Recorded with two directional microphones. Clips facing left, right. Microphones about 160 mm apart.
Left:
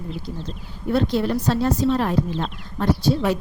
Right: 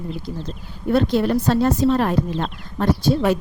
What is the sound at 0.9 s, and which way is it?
Speech, 55° right (ahead or behind).